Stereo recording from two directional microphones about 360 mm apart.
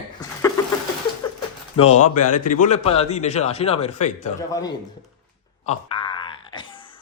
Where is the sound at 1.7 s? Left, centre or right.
Centre.